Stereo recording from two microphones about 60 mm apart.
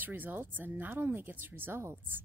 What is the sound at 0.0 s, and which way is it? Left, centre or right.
A woman's voice, right.